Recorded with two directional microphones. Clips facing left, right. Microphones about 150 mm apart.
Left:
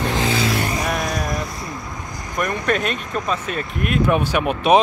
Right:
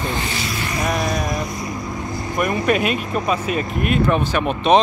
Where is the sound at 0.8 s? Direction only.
Centre (ahead or behind).